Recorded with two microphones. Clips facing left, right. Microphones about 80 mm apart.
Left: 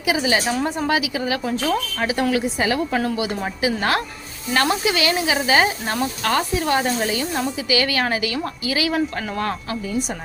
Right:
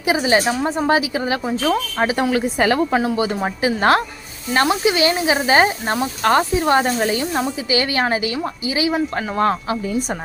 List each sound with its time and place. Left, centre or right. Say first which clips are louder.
0.0 s speech: right 3 dB; right